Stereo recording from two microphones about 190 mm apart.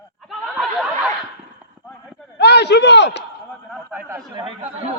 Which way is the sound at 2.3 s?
60° left (ahead or behind).